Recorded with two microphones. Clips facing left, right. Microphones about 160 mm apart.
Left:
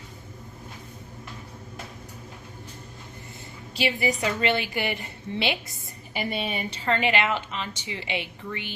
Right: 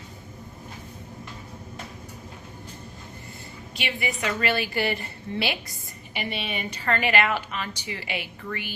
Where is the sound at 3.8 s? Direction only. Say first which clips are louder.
Left 5 dB; 30° left (ahead or behind).